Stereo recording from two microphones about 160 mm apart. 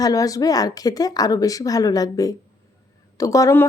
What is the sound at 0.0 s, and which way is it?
A woman's voice, 20° left (ahead or behind).